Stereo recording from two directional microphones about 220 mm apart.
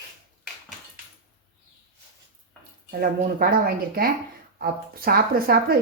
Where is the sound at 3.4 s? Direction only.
45° right (ahead or behind).